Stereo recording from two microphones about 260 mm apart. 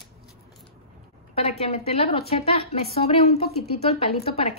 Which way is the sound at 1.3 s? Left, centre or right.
Left.